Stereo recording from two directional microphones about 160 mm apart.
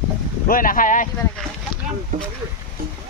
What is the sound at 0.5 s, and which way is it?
Speech, 60° left (ahead or behind).